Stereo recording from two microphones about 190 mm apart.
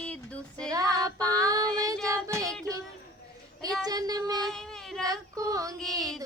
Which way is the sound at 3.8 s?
20° right (ahead or behind).